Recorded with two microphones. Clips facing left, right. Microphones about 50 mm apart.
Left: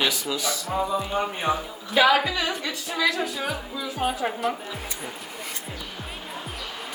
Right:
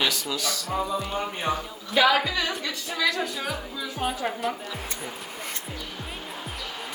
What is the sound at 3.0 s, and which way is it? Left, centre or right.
A woman's voice, centre.